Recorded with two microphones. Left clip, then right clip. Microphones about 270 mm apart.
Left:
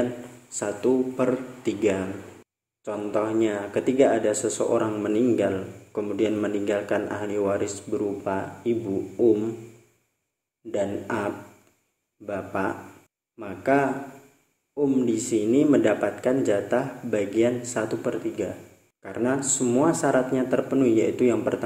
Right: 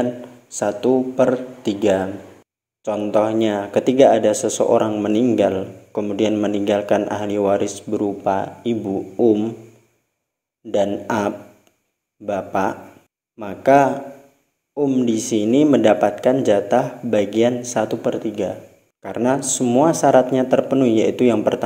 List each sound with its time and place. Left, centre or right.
0.5 s speech: right
10.7 s speech: right